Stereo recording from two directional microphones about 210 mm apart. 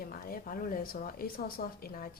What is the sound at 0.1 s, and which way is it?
Speech, 45° left (ahead or behind).